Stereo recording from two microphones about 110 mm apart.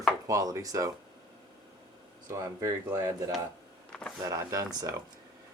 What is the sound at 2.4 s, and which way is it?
Speech, 30° right (ahead or behind).